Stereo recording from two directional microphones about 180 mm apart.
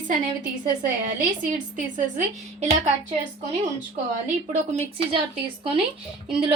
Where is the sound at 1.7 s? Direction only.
40° right (ahead or behind).